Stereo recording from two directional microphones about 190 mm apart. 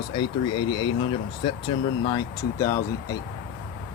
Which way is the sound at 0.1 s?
25° left (ahead or behind).